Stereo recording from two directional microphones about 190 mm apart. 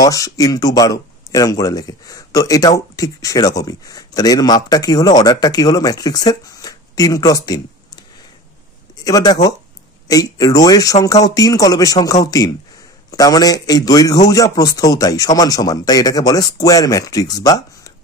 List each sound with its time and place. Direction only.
0.0 s speech: 20° left (ahead or behind)
9.0 s speech: 20° left (ahead or behind)